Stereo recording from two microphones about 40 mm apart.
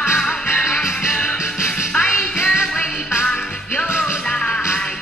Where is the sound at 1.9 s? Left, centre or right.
Left.